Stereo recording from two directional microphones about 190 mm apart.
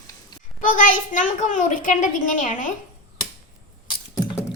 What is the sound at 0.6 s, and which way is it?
A child's voice, 45° left (ahead or behind).